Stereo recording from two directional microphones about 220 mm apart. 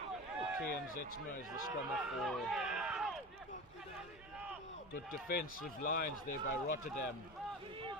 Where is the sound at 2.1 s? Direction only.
Centre (ahead or behind).